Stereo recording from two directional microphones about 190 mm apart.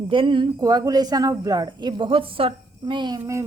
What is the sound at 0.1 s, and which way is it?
Speech, 25° right (ahead or behind).